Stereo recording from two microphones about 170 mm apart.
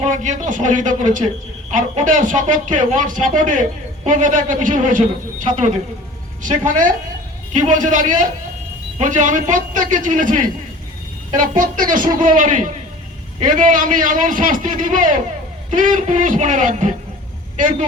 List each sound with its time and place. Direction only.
0.0 s speech: 45° right (ahead or behind)